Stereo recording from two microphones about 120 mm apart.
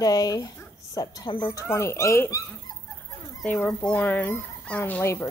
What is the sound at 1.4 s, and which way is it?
Speech, 20° left (ahead or behind).